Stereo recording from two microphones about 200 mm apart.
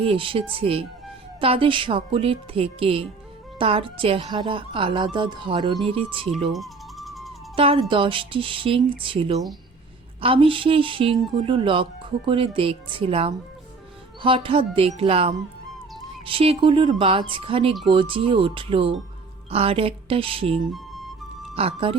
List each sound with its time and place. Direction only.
0.0 s speech: 25° right (ahead or behind)
6.5 s music: centre (ahead or behind)
7.5 s speech: 30° right (ahead or behind)